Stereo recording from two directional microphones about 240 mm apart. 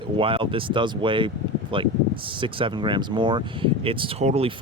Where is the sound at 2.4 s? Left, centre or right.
Right.